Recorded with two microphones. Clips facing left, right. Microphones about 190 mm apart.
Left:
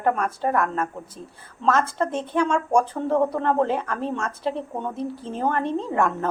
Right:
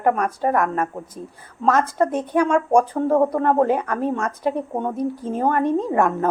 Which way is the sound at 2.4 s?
55° right (ahead or behind).